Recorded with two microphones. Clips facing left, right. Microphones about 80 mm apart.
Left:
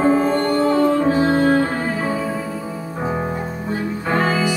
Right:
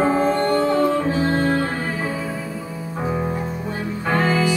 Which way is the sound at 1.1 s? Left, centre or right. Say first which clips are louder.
Left 4 dB; centre.